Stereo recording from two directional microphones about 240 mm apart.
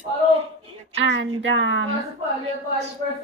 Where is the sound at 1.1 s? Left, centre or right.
Right.